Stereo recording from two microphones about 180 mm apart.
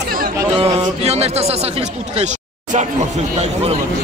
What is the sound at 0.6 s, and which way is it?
Speech, 35° right (ahead or behind).